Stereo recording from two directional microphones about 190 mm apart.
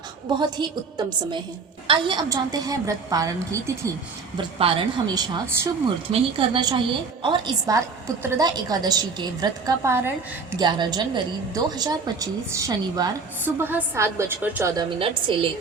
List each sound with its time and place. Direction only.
0.3 s a woman's voice: 25° right (ahead or behind)
4.4 s a woman's voice: 30° right (ahead or behind); by 14.8 s 15° right (ahead or behind)
14.8 s a woman's voice: 25° right (ahead or behind)